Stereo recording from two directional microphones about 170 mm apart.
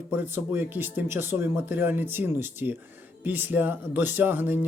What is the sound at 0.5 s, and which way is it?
Speech, 10° right (ahead or behind).